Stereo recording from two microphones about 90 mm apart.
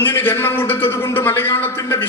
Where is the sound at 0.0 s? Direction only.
25° left (ahead or behind).